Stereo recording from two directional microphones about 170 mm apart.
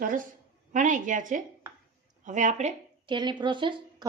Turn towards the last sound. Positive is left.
turn(degrees=-30)  # may be behind; listen again after turning